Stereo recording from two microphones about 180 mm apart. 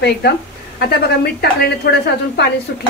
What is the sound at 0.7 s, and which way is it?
A woman's voice, 65° left (ahead or behind).